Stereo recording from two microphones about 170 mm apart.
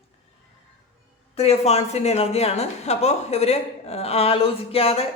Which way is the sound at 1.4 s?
40° left (ahead or behind).